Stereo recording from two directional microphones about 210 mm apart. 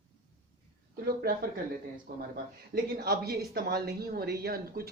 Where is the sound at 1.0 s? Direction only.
45° right (ahead or behind).